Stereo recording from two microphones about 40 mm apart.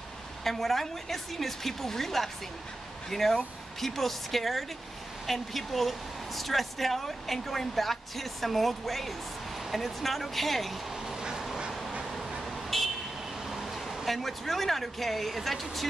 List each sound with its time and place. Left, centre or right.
0.4 s speech: centre
11.1 s duck: centre
12.0 s a sound: centre
12.7 s vehicle: centre
13.5 s speech: centre